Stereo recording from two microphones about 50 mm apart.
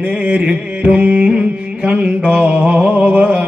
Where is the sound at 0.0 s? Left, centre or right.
Right.